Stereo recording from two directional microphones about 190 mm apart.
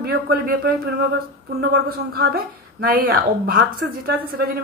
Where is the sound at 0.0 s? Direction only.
50° right (ahead or behind).